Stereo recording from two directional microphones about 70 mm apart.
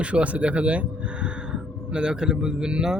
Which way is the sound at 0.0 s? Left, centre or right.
Centre.